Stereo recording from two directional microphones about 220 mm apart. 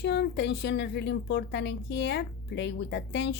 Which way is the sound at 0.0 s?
50° left (ahead or behind).